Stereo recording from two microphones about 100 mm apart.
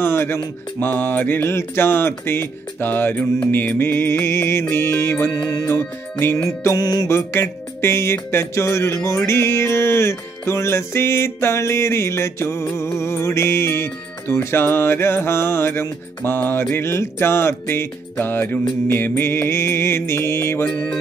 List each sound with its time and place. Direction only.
0.0 s music: 25° left (ahead or behind)
5.3 s music: 40° left (ahead or behind)
5.7 s music: 25° left (ahead or behind)
6.8 s music: 40° left (ahead or behind)
7.1 s music: 25° left (ahead or behind)
20.6 s music: 10° left (ahead or behind)